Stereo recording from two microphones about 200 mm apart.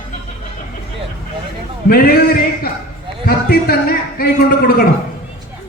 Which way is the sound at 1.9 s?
50° left (ahead or behind).